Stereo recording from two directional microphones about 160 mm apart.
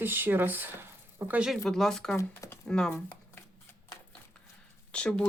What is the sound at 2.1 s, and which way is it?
Speech, 15° left (ahead or behind).